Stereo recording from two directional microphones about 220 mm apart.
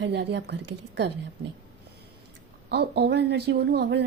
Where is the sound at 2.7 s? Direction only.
50° right (ahead or behind).